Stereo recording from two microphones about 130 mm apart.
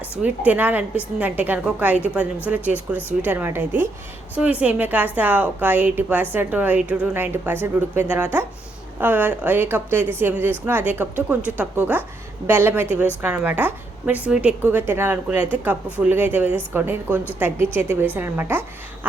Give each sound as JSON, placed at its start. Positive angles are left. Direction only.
{"t": 0.2, "sound": "a woman's voice", "side_deg": -10}